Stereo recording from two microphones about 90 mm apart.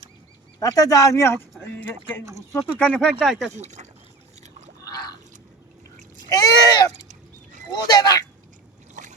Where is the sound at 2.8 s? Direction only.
10° left (ahead or behind).